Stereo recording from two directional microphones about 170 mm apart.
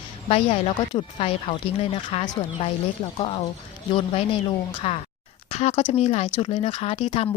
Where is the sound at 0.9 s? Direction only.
35° left (ahead or behind).